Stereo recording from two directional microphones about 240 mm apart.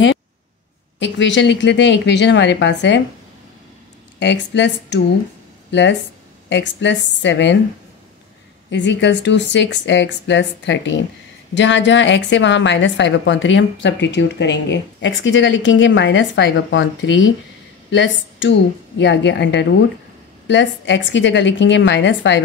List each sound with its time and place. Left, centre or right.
0.9 s a woman's voice: left
4.2 s a woman's voice: left
8.6 s a woman's voice: left